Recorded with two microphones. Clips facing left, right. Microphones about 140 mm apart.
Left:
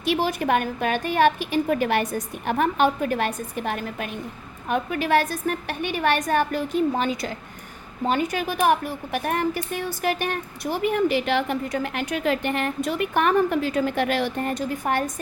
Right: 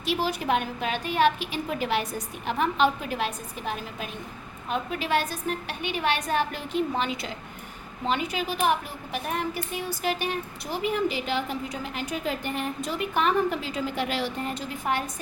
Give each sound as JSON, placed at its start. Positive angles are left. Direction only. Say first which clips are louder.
{"t": 0.0, "sound": "a woman's voice", "louder": "left 4 dB", "side_deg": 55}